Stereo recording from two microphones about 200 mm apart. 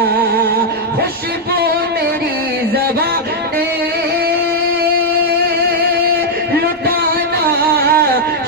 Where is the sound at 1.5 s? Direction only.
50° right (ahead or behind).